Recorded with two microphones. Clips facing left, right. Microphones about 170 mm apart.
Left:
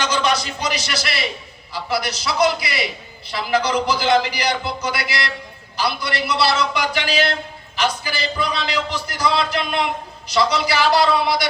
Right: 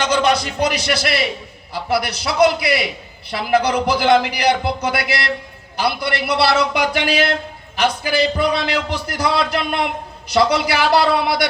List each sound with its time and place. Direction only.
0.0 s a man's voice: 55° right (ahead or behind)